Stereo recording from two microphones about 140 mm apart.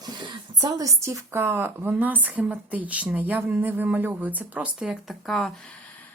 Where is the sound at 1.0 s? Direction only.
20° right (ahead or behind); by 5.6 s centre (ahead or behind).